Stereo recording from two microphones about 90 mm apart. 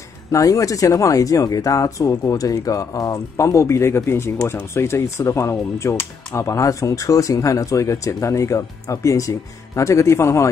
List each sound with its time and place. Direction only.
0.3 s speech: 40° left (ahead or behind)